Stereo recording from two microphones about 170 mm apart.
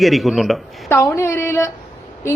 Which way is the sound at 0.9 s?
15° left (ahead or behind).